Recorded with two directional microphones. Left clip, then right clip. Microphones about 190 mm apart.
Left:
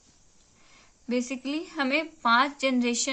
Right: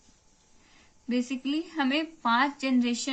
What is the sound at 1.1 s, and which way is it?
A woman's voice, 25° left (ahead or behind).